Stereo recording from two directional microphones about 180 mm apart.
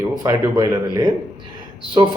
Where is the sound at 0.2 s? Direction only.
20° right (ahead or behind).